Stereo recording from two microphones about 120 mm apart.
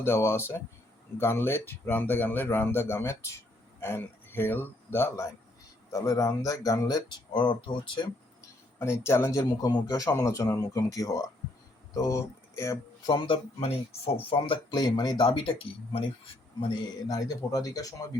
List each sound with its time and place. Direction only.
0.0 s speech: 20° left (ahead or behind); by 8.4 s 40° left (ahead or behind)
8.8 s speech: 20° left (ahead or behind)
13.1 s speech: 40° left (ahead or behind)
16.6 s speech: 35° left (ahead or behind)